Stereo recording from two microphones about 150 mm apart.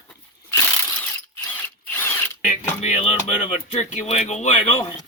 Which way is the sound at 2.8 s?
45° left (ahead or behind).